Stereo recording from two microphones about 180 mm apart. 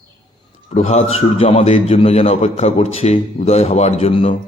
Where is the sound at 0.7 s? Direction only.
40° left (ahead or behind).